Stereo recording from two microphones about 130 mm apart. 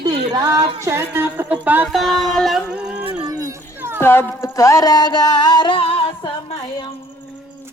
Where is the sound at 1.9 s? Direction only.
Centre (ahead or behind).